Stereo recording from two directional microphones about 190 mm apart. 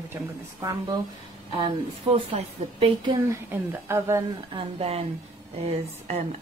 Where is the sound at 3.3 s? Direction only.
15° right (ahead or behind).